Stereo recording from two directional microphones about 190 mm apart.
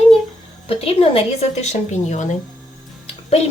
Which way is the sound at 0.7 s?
30° left (ahead or behind).